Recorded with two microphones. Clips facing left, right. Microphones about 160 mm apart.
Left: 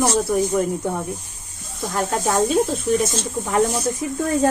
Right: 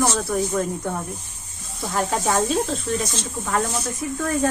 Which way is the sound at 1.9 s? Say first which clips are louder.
Left 1 dB; centre (ahead or behind).